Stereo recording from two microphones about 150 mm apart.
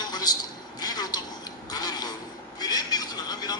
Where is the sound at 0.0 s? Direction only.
25° left (ahead or behind).